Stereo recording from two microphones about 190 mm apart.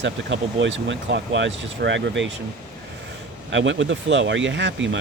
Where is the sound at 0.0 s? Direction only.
75° right (ahead or behind).